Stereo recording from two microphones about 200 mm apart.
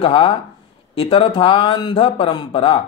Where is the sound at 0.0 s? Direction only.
25° left (ahead or behind).